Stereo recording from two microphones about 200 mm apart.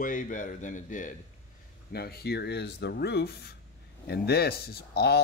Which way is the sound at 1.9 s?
50° left (ahead or behind).